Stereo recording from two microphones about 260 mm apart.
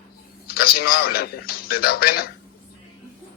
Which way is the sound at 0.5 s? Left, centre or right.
Left.